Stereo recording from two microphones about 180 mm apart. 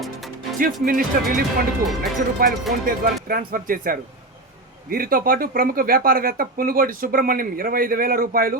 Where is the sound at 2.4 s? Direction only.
50° right (ahead or behind).